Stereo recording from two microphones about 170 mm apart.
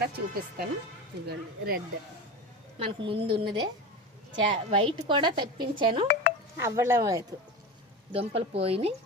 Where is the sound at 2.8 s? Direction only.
30° right (ahead or behind).